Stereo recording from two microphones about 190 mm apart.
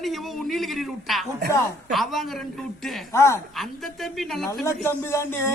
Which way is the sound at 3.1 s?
15° left (ahead or behind).